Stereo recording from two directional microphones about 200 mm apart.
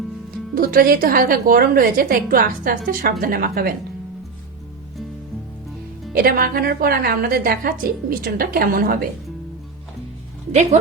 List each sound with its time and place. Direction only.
0.5 s a woman's voice: 45° right (ahead or behind)
6.1 s a woman's voice: 45° right (ahead or behind)
10.5 s speech: 35° right (ahead or behind)